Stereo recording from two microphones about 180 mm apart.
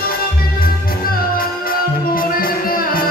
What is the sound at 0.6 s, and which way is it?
Music, 55° left (ahead or behind).